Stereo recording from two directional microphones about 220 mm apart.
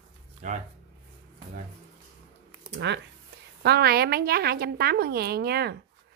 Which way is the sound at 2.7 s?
50° right (ahead or behind).